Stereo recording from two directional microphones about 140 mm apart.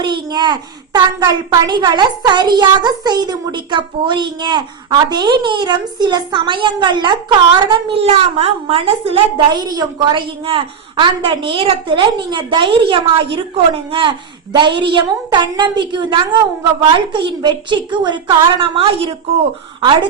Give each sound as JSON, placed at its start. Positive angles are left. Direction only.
{"t": 0.0, "sound": "a child's voice", "side_deg": -30}
{"t": 9.5, "sound": "a child's voice", "side_deg": -30}